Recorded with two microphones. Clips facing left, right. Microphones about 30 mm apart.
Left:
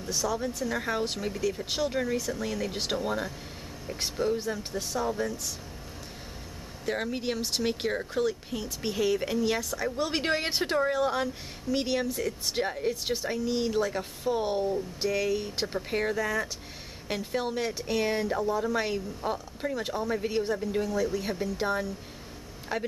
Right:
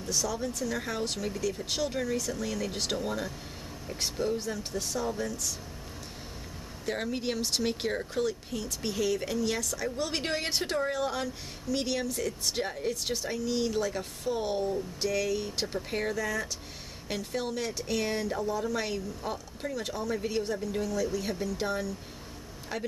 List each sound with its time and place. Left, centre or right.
0.1 s speech: centre
6.9 s speech: centre
16.2 s speech: left